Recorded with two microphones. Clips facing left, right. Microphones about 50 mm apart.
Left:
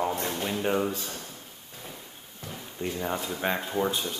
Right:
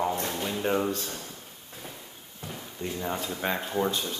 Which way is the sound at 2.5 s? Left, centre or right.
Centre.